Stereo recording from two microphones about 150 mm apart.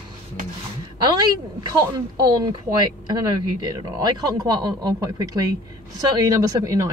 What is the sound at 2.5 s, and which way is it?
Speech, 30° right (ahead or behind).